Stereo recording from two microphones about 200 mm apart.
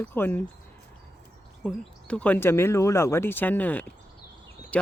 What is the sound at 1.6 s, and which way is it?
Speech, 5° left (ahead or behind).